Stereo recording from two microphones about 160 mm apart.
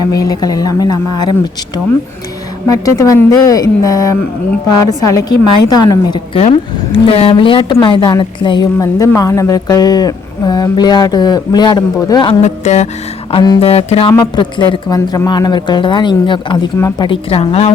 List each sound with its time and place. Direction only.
0.1 s a woman's voice: 20° left (ahead or behind)
5.6 s a woman's voice: 25° left (ahead or behind)
12.4 s speech: 45° left (ahead or behind)
13.3 s a woman's voice: 25° left (ahead or behind)
13.6 s a woman's voice: 40° left (ahead or behind)
16.7 s a woman's voice: 20° left (ahead or behind)
17.1 s a woman's voice: 35° left (ahead or behind)